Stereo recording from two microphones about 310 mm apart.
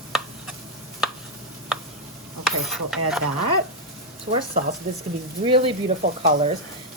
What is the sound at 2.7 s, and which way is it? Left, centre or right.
Speech, centre.